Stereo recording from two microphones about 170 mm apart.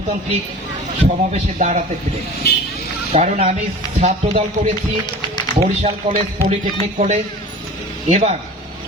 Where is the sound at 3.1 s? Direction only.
35° right (ahead or behind).